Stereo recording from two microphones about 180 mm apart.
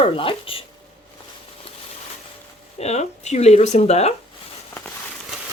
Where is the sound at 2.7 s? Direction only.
35° left (ahead or behind).